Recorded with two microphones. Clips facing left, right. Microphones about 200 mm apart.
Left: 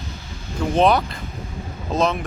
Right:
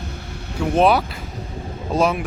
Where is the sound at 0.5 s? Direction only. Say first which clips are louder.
Right 1 dB; 5° right (ahead or behind).